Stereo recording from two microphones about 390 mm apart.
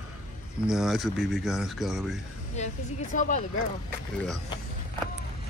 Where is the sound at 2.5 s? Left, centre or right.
Centre.